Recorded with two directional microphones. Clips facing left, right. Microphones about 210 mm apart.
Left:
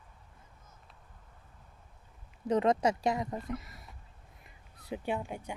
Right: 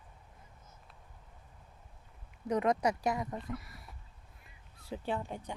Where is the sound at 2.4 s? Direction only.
25° left (ahead or behind).